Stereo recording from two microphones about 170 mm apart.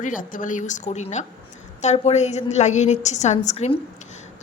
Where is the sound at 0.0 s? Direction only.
50° left (ahead or behind).